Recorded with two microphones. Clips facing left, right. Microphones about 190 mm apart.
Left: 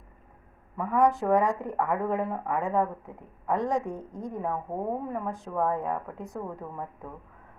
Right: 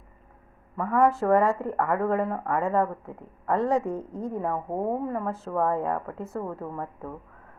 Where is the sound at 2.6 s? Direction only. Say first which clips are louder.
Right 2 dB; 15° left (ahead or behind).